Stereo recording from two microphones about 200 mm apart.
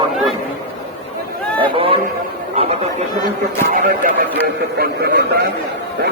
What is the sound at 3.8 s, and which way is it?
Speech, 45° right (ahead or behind).